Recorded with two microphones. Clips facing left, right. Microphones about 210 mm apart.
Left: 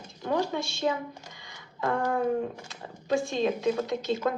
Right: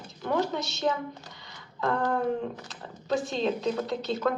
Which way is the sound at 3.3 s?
10° left (ahead or behind).